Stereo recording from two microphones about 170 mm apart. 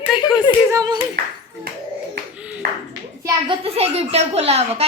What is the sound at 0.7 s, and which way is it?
Speech, 20° right (ahead or behind).